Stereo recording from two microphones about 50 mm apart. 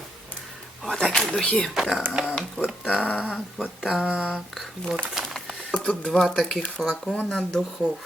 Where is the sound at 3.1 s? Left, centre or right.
Centre.